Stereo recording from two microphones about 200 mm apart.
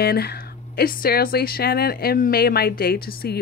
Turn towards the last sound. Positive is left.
turn(degrees=50)  # may be behind; listen again after turning